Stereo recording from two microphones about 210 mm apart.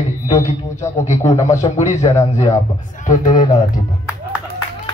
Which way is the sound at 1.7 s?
30° left (ahead or behind).